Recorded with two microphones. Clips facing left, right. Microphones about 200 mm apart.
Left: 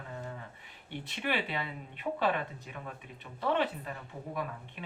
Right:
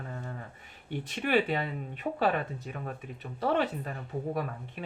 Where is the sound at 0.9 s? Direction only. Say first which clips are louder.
Right 4 dB; 45° right (ahead or behind).